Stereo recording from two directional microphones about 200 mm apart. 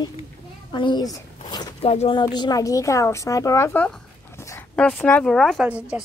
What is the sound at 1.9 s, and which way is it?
A woman's voice, 30° left (ahead or behind).